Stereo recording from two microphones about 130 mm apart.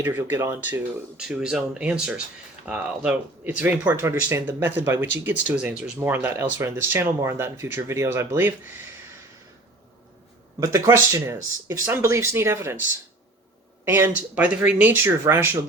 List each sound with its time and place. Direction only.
0.0 s speech: 15° right (ahead or behind)
10.6 s speech: 25° right (ahead or behind)
13.8 s speech: 20° right (ahead or behind)